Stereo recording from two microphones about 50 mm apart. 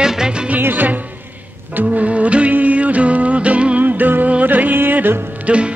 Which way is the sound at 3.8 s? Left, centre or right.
Right.